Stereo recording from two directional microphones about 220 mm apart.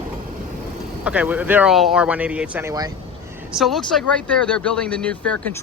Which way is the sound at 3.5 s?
Centre (ahead or behind).